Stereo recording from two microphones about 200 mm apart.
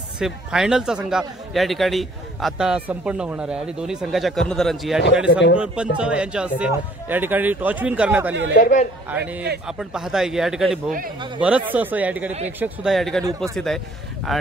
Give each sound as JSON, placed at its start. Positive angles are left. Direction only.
{"t": 0.2, "sound": "a man's voice", "side_deg": -5}
{"t": 8.5, "sound": "a man's voice", "side_deg": 40}
{"t": 9.1, "sound": "a man's voice", "side_deg": -10}